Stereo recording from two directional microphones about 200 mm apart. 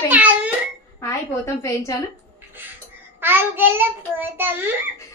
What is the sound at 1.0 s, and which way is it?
Speech, 15° left (ahead or behind).